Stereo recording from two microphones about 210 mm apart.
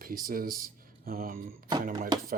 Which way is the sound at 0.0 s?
40° right (ahead or behind).